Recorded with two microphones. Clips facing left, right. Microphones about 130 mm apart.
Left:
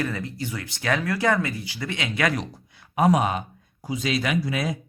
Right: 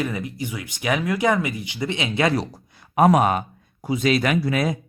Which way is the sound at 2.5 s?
55° right (ahead or behind).